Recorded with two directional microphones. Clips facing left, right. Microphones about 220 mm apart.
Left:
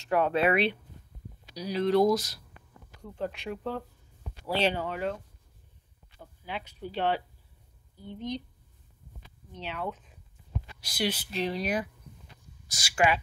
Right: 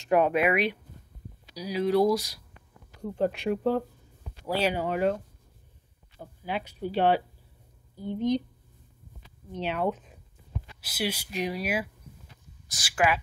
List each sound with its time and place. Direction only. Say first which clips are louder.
0.0 s speech: right 2 dB; 15° right (ahead or behind)
3.0 s a woman's voice: right 7 dB; 45° right (ahead or behind)
4.5 s speech: right 1 dB; 10° right (ahead or behind)
4.8 s a woman's voice: right 6 dB; 50° right (ahead or behind)
6.4 s speech: right 6 dB; 5° right (ahead or behind)
8.0 s a woman's voice: right 9 dB; 45° right (ahead or behind)
9.7 s speech: right 7 dB; 65° right (ahead or behind)
10.8 s speech: even; 5° right (ahead or behind)